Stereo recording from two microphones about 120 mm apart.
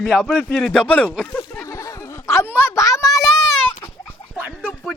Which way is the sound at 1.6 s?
30° left (ahead or behind).